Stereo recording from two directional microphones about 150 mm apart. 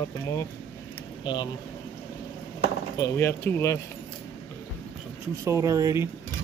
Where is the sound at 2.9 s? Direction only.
20° left (ahead or behind).